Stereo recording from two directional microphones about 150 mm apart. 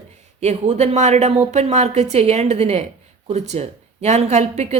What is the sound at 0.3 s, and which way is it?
A woman's voice, 45° right (ahead or behind).